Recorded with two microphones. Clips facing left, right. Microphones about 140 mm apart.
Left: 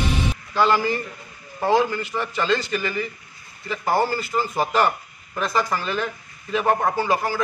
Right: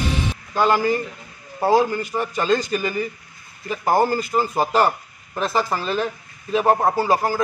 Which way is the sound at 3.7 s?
45° right (ahead or behind).